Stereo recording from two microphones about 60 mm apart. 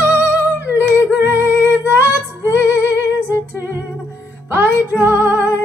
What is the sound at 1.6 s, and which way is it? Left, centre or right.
Female singing, right.